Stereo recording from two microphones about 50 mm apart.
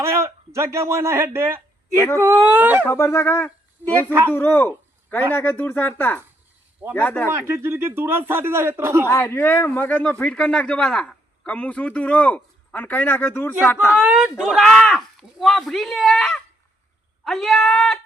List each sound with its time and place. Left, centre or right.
0.0 s speech: right
2.1 s speech: right
2.9 s speech: left
3.3 s a man's voice: left
7.3 s speech: right
9.2 s a man's voice: left
10.0 s a man's voice: left
11.4 s a man's voice: left
14.3 s speech: centre
14.7 s speech: centre